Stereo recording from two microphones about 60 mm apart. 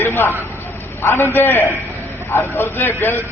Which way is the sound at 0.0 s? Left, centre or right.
Left.